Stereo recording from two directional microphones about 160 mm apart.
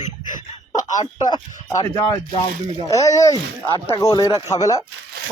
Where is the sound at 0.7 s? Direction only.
25° left (ahead or behind).